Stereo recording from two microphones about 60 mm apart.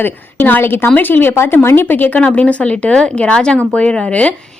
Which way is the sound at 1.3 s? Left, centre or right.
Left.